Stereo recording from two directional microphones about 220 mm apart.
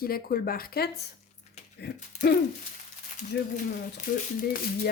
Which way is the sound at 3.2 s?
35° left (ahead or behind).